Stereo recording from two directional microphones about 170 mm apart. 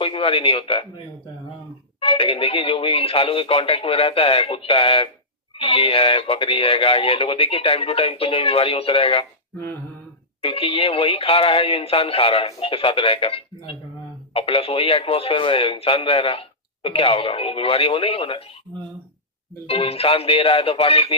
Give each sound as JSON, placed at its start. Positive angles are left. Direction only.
{"t": 0.0, "sound": "speech", "side_deg": 35}
{"t": 10.4, "sound": "speech", "side_deg": 35}
{"t": 19.6, "sound": "speech", "side_deg": 35}